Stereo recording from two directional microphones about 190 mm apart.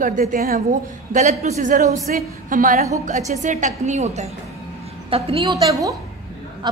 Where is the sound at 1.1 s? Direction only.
40° right (ahead or behind).